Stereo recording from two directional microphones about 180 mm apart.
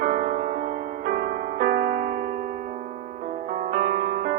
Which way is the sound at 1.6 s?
55° right (ahead or behind).